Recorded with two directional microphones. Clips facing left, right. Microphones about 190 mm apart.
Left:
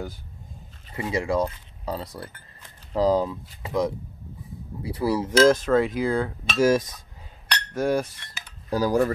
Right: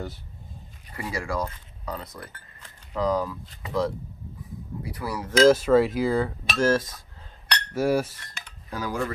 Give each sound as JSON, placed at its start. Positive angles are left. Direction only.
{"t": 0.9, "sound": "speech", "side_deg": 20}
{"t": 5.5, "sound": "cutlery", "side_deg": -5}
{"t": 6.6, "sound": "cutlery", "side_deg": 15}
{"t": 7.7, "sound": "a sound", "side_deg": -5}
{"t": 8.6, "sound": "speech", "side_deg": 35}